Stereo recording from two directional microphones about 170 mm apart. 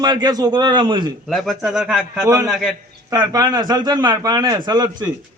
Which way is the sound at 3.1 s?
20° right (ahead or behind).